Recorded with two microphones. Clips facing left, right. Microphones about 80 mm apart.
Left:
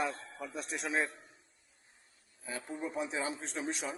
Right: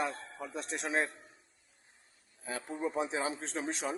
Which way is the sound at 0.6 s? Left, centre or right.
Right.